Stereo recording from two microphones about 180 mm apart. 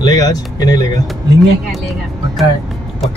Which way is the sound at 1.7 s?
Centre (ahead or behind).